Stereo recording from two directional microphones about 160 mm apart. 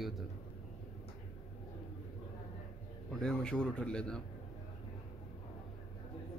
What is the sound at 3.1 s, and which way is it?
Speech, 5° left (ahead or behind).